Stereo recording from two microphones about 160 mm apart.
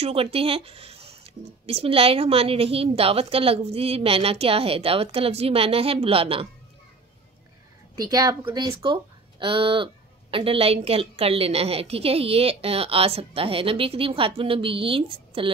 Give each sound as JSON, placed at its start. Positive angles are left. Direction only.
{"t": 0.0, "sound": "speech", "side_deg": -35}
{"t": 7.9, "sound": "speech", "side_deg": -25}